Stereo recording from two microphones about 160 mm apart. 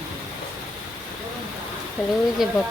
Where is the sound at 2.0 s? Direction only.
Centre (ahead or behind).